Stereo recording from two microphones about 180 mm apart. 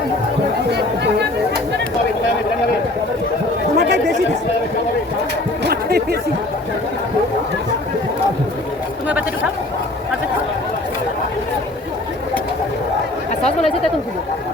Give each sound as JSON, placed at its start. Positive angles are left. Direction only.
{"t": 3.8, "sound": "chatter", "side_deg": -70}
{"t": 5.6, "sound": "chatter", "side_deg": -60}
{"t": 13.4, "sound": "chatter", "side_deg": 35}